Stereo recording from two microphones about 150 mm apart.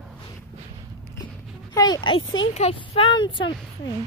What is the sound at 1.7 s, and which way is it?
Speech, 25° left (ahead or behind).